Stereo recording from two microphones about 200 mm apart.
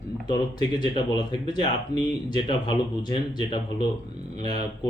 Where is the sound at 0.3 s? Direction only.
20° left (ahead or behind).